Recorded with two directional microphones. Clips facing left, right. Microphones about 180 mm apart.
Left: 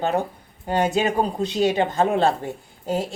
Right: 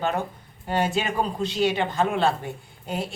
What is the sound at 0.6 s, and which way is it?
Speech, 15° left (ahead or behind).